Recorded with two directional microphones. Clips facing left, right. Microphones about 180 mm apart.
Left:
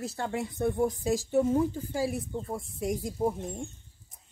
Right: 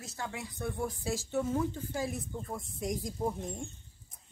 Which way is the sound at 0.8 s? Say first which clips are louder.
Left 7 dB; 15° left (ahead or behind).